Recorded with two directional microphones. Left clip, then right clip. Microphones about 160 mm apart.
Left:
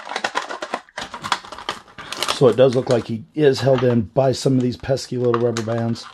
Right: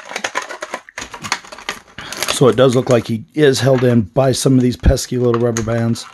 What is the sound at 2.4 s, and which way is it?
Speech, 45° right (ahead or behind).